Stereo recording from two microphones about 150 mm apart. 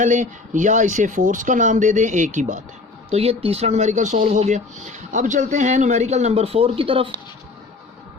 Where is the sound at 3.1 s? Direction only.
40° right (ahead or behind).